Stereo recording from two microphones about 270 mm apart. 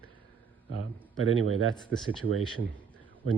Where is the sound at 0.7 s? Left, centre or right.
Right.